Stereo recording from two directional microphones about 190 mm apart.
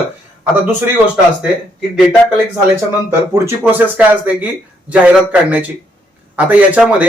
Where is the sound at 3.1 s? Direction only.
10° right (ahead or behind).